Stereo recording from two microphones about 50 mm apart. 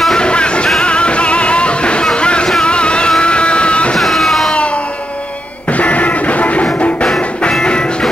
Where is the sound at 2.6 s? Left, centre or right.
Left.